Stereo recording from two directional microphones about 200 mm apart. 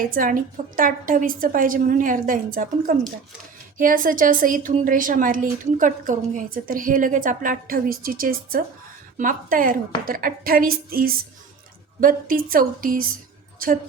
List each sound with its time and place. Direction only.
0.1 s a woman's voice: 45° right (ahead or behind)